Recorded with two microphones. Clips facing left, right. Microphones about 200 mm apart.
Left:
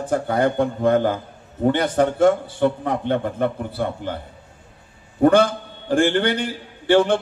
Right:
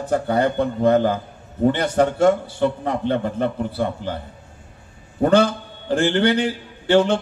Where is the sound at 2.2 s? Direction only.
55° left (ahead or behind).